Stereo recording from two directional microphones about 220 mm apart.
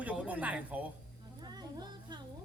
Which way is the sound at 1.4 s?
20° right (ahead or behind).